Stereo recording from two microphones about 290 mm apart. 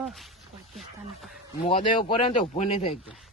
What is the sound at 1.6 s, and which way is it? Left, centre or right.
Speech, centre.